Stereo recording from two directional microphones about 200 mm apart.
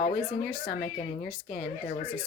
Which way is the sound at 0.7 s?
45° left (ahead or behind).